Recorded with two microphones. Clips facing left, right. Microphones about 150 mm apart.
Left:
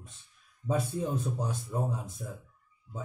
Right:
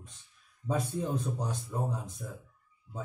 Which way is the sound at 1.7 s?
10° left (ahead or behind).